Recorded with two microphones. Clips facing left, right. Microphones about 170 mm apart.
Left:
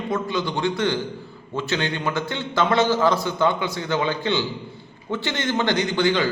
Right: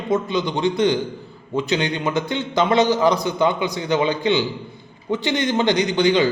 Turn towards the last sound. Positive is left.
turn(degrees=-20)  # may be behind; listen again after turning